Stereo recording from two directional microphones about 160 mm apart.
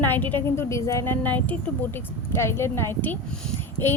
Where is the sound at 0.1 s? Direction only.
10° left (ahead or behind).